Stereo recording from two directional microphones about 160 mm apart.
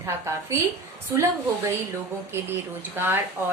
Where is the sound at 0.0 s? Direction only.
15° right (ahead or behind).